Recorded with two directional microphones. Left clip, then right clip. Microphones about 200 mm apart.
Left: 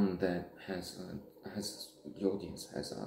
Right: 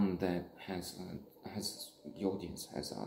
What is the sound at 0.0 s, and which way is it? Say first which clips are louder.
Speech: left 2 dB; 35° right (ahead or behind).